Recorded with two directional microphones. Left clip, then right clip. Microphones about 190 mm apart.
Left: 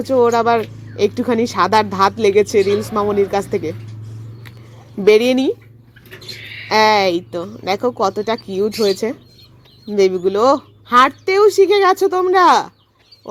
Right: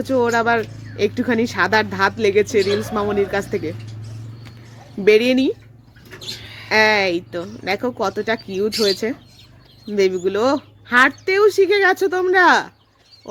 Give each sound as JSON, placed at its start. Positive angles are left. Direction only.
{"t": 0.0, "sound": "speech", "side_deg": 5}
{"t": 5.0, "sound": "speech", "side_deg": 10}
{"t": 6.7, "sound": "speech", "side_deg": 10}